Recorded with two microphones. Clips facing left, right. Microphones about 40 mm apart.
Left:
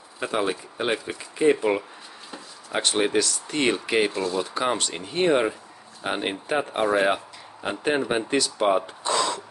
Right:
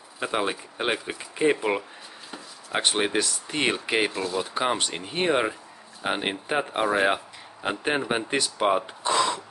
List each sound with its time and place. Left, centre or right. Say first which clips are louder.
0.2 s speech: left 1 dB; centre
4.1 s speech: left 2 dB; centre
4.6 s speech: even; centre